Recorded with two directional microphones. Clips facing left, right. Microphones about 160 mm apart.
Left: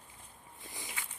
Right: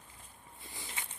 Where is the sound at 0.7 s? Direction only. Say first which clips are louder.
Left 1 dB; 15° left (ahead or behind).